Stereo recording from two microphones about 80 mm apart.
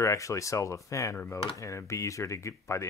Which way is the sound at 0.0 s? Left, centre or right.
Left.